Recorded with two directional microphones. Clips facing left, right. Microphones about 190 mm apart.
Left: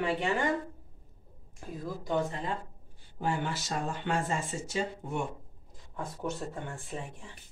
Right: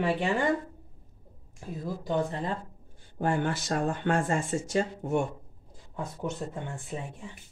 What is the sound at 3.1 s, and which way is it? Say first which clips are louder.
Speech: right 4 dB; 50° right (ahead or behind).